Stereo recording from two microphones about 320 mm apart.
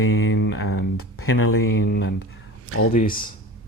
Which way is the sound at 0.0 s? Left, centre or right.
Left.